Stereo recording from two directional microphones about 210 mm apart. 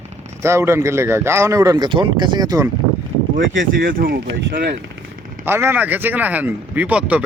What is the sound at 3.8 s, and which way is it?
Speech, 45° right (ahead or behind).